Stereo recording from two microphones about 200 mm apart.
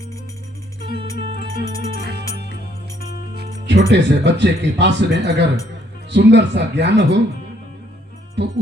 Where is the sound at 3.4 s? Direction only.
60° right (ahead or behind).